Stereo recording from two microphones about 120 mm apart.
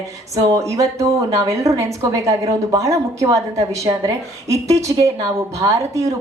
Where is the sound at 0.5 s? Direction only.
25° right (ahead or behind).